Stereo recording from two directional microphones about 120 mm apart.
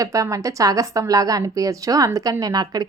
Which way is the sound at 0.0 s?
30° right (ahead or behind).